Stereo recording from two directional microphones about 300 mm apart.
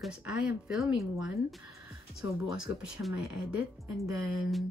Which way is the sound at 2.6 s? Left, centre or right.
Centre.